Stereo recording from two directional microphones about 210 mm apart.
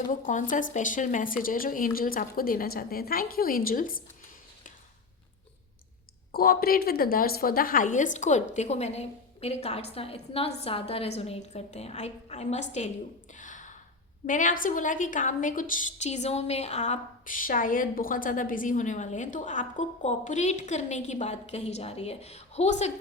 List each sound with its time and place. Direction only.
0.1 s a woman's voice: 35° left (ahead or behind)
6.3 s a woman's voice: 45° left (ahead or behind)
13.4 s gasp: 35° left (ahead or behind)
14.3 s a woman's voice: 40° left (ahead or behind)